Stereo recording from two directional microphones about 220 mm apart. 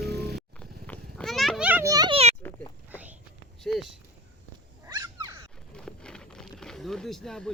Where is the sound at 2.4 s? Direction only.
10° left (ahead or behind).